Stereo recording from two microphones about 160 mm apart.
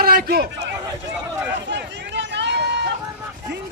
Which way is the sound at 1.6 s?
90° right.